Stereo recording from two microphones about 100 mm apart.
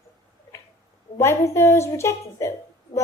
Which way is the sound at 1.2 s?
25° left (ahead or behind).